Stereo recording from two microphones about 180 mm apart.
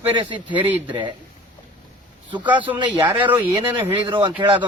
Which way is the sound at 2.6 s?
25° right (ahead or behind).